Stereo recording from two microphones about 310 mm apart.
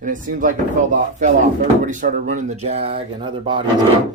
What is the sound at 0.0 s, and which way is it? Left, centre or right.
Speech, right.